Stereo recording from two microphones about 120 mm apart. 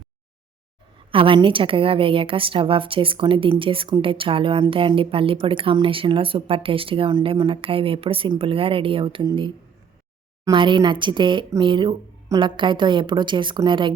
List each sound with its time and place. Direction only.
1.1 s speech: 45° right (ahead or behind)
10.5 s a woman's voice: 40° right (ahead or behind)